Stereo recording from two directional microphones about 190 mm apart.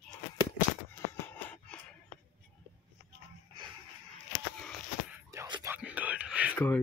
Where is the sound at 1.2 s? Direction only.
10° left (ahead or behind).